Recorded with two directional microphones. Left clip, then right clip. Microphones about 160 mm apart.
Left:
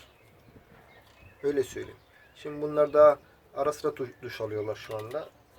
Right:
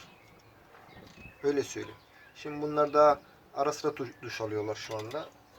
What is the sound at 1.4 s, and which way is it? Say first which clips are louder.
Speech: left 1 dB; 35° left (ahead or behind).